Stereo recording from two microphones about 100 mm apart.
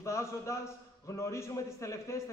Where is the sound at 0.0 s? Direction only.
30° left (ahead or behind).